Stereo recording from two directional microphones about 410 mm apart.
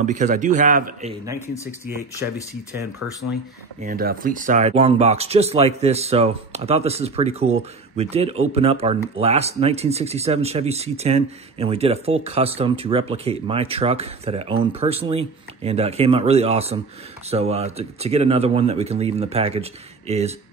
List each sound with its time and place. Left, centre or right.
0.0 s speech: centre
1.7 s speech: centre
3.8 s speech: right